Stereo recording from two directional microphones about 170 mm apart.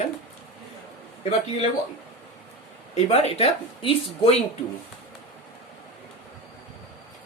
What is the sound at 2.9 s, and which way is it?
Speech, 40° left (ahead or behind).